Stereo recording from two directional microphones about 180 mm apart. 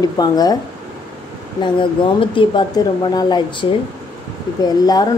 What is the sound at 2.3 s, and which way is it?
Speech, 25° left (ahead or behind).